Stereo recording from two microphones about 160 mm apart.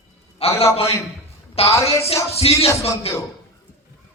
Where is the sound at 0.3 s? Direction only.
40° left (ahead or behind).